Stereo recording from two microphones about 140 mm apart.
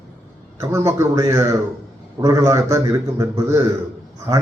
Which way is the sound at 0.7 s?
20° right (ahead or behind).